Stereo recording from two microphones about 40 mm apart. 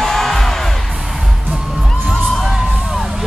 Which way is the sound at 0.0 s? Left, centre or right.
Centre.